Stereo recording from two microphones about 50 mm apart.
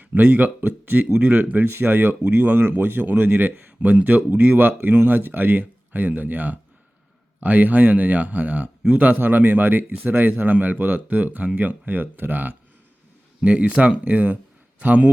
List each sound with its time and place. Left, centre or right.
0.0 s speech: right
3.1 s speech: right
4.3 s speech: right
13.4 s speech: right